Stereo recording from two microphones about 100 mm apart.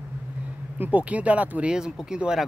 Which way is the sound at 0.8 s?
15° right (ahead or behind).